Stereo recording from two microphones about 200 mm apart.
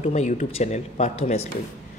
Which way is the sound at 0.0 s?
35° left (ahead or behind).